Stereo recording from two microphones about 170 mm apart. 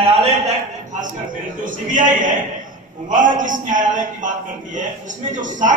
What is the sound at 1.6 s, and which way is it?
A man's voice, 50° right (ahead or behind).